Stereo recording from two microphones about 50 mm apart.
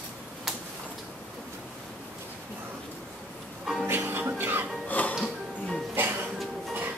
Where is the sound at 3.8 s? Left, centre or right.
Right.